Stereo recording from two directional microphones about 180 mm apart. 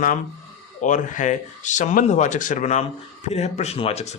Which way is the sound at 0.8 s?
45° left (ahead or behind).